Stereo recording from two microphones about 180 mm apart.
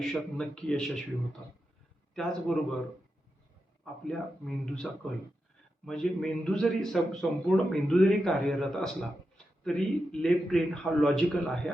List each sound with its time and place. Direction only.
0.0 s speech: centre (ahead or behind)
2.1 s speech: centre (ahead or behind)
4.0 s speech: centre (ahead or behind)